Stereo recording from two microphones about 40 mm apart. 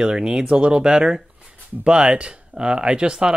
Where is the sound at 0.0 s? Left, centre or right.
Centre.